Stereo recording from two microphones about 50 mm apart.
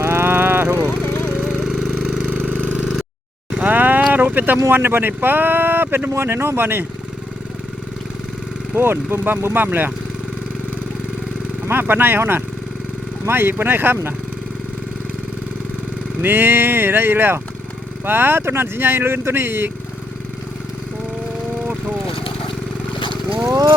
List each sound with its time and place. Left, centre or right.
0.0 s vehicle: right
0.9 s a sound: left
2.5 s engine: right
3.5 s vehicle: right
4.1 s speech: right
6.2 s speech: right
8.7 s speech: right
11.7 s speech: right
16.2 s speech: right